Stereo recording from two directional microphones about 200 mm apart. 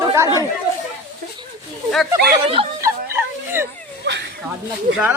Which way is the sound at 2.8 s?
10° right (ahead or behind).